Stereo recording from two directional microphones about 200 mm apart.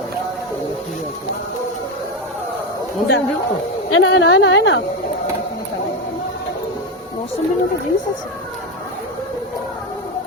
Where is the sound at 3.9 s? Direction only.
75° left (ahead or behind).